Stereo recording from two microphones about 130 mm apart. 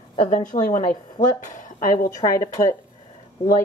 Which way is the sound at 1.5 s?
90° left.